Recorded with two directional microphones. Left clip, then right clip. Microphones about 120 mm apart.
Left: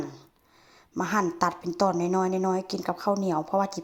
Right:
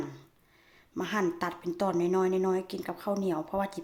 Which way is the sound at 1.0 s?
40° left (ahead or behind).